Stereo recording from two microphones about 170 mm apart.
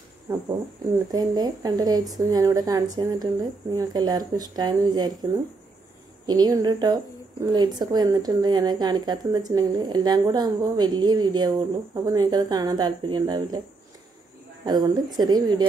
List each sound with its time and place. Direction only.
0.3 s a woman's voice: 20° right (ahead or behind)
14.6 s a woman's voice: 25° right (ahead or behind)